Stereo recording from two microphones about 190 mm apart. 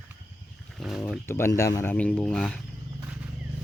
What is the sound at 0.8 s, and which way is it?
Speech, centre (ahead or behind).